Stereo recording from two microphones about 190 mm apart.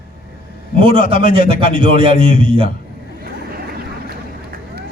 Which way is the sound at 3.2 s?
50° right (ahead or behind).